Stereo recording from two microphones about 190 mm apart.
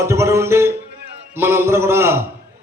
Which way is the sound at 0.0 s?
15° right (ahead or behind).